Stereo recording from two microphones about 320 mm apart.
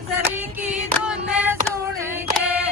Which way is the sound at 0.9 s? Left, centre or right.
Centre.